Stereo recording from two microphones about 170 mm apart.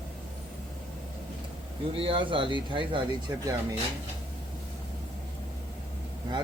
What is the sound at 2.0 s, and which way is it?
Speech, 30° right (ahead or behind).